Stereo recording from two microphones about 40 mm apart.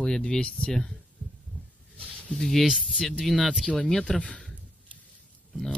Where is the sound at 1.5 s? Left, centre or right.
Left.